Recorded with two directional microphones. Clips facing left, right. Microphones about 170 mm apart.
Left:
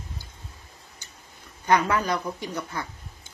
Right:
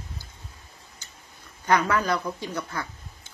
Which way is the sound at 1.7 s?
20° left (ahead or behind).